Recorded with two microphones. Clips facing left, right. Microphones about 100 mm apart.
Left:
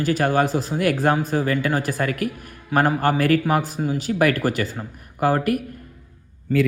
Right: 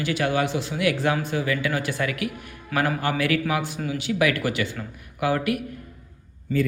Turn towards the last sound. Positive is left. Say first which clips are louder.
# left 4 dB
turn(degrees=50)  # may be behind; listen again after turning